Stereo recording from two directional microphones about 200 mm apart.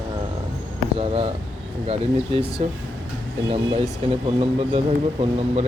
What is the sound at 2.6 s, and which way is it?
A man's voice, 30° right (ahead or behind).